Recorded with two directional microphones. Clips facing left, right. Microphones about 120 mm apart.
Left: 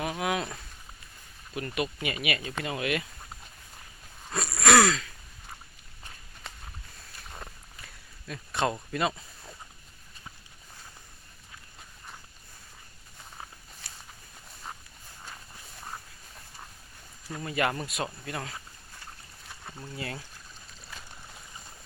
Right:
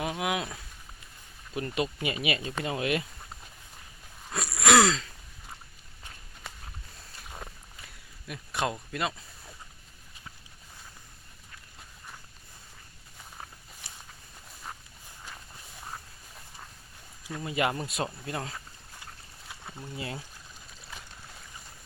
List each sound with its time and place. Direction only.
0.0 s a sound: 15° right (ahead or behind)
1.5 s speech: 30° right (ahead or behind)
4.3 s wheeze: 5° right (ahead or behind); by 5.1 s 25° right (ahead or behind)
7.3 s walk: 5° right (ahead or behind)
8.3 s speech: 5° right (ahead or behind)
17.4 s speech: 20° right (ahead or behind)
19.5 s a sound: centre (ahead or behind)
20.0 s speech: 20° right (ahead or behind)